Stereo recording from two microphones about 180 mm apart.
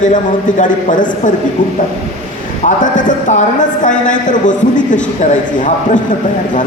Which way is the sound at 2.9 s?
45° left (ahead or behind).